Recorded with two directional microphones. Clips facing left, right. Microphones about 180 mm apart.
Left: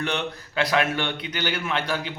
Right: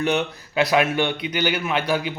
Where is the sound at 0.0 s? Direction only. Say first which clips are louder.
Right 5 dB; 10° right (ahead or behind).